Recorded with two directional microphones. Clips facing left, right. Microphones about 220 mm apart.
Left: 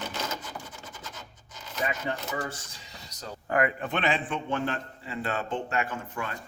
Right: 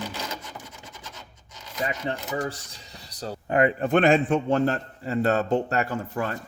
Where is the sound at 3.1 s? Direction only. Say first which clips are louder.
Right 7 dB; 35° right (ahead or behind).